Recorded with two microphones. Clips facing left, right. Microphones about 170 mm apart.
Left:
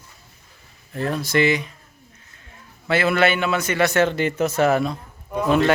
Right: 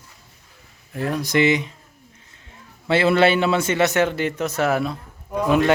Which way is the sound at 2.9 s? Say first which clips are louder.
Right 3 dB; 30° right (ahead or behind).